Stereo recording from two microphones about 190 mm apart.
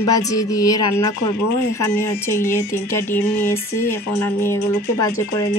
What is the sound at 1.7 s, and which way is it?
Speech, 15° left (ahead or behind).